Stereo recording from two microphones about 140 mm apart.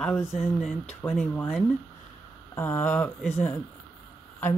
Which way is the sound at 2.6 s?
15° left (ahead or behind).